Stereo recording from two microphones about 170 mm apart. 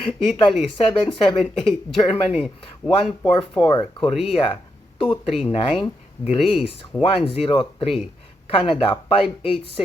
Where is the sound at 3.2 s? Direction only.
25° left (ahead or behind).